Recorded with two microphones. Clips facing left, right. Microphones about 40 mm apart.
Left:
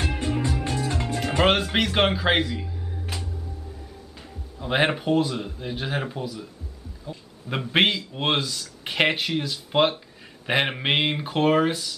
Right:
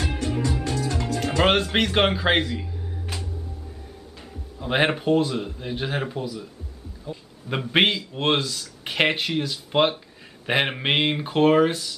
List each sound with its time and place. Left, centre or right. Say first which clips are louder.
0.2 s music: even; centre
1.4 s speech: right 1 dB; centre
4.6 s speech: right 1 dB; centre